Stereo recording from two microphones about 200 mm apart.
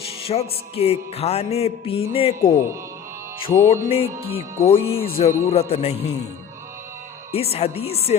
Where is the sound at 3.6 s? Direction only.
35° left (ahead or behind).